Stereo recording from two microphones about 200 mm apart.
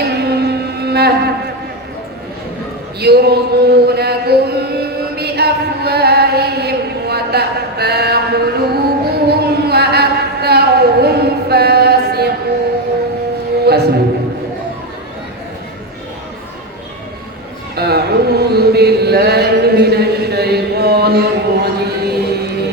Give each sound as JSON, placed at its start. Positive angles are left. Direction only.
{"t": 0.0, "sound": "music", "side_deg": -55}
{"t": 3.0, "sound": "chant", "side_deg": -55}
{"t": 9.3, "sound": "a sound", "side_deg": -55}
{"t": 13.7, "sound": "music", "side_deg": -55}
{"t": 17.7, "sound": "chant", "side_deg": -55}